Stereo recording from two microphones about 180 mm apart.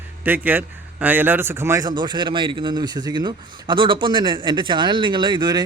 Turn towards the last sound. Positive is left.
turn(degrees=-25)  # may be behind; listen again after turning